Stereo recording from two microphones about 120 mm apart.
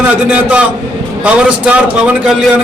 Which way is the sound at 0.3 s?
10° right (ahead or behind).